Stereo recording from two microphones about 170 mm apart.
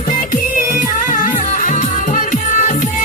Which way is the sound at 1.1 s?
50° left (ahead or behind).